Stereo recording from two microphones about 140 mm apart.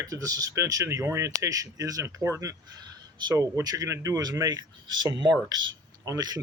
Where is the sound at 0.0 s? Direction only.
25° right (ahead or behind).